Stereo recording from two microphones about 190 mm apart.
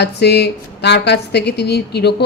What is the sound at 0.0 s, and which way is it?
A woman's voice, 60° left (ahead or behind).